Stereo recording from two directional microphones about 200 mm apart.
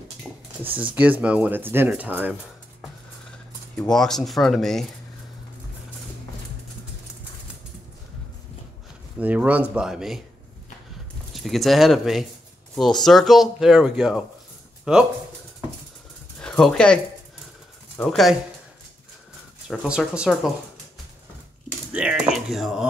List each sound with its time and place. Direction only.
0.9 s speech: 5° right (ahead or behind)
3.7 s speech: 5° left (ahead or behind)
9.2 s speech: 10° right (ahead or behind)
11.3 s speech: centre (ahead or behind)
16.3 s speech: 5° left (ahead or behind)
19.7 s speech: centre (ahead or behind)
21.9 s speech: 5° right (ahead or behind)